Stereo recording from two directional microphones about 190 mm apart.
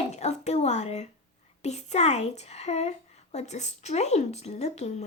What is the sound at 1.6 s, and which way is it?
A woman's voice, 35° left (ahead or behind).